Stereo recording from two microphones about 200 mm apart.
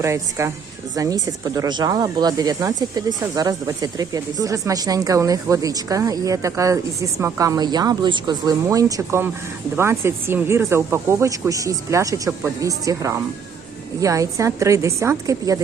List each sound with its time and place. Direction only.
0.0 s speech: 15° right (ahead or behind)